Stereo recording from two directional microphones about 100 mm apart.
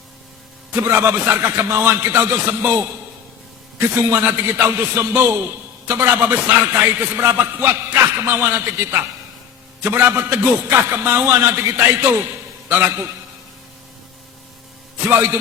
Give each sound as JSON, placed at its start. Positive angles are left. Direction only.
{"t": 0.8, "sound": "a man's voice", "side_deg": -25}
{"t": 3.8, "sound": "a man's voice", "side_deg": -20}
{"t": 15.1, "sound": "a man's voice", "side_deg": -20}